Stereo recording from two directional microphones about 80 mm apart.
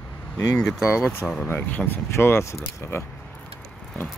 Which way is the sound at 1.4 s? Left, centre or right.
Left.